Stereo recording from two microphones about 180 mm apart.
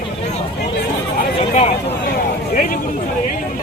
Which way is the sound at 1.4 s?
35° left (ahead or behind).